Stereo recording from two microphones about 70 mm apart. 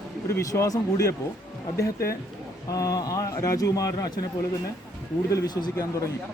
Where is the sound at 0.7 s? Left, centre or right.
Left.